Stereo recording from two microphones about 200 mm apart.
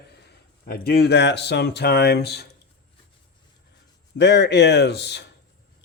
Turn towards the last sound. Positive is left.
turn(degrees=55)  # may be behind; listen again after turning